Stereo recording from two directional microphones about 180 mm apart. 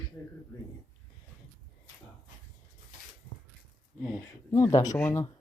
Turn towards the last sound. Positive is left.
turn(degrees=15)  # may be behind; listen again after turning